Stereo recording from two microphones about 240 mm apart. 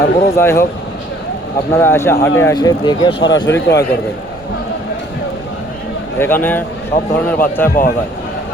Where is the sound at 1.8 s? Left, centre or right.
Centre.